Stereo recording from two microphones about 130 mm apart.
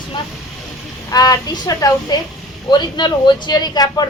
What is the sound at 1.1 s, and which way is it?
A woman's voice, 30° left (ahead or behind).